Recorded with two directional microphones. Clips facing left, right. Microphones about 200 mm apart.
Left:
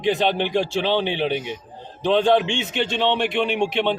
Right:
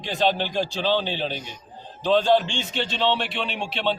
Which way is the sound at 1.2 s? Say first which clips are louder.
Left 7 dB; 65° left (ahead or behind).